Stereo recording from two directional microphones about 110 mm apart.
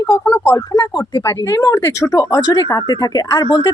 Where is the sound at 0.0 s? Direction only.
25° left (ahead or behind).